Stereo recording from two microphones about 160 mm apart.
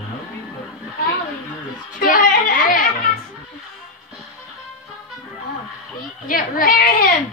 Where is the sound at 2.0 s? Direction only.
55° left (ahead or behind).